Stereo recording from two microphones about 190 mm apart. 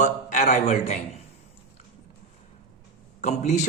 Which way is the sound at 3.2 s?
35° left (ahead or behind).